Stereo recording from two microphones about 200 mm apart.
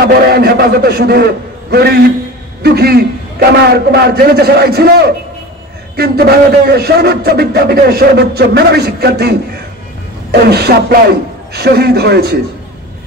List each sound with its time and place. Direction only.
0.0 s a man's voice: 50° right (ahead or behind)